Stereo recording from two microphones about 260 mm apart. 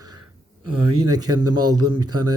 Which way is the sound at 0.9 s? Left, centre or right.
Centre.